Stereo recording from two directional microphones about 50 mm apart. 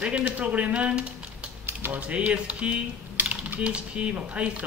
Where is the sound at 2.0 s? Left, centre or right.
Right.